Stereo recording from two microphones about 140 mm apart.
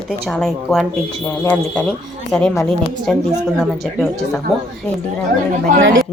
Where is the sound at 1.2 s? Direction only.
15° left (ahead or behind).